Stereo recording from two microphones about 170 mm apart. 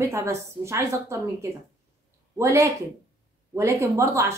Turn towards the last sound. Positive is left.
turn(degrees=-15)  # may be behind; listen again after turning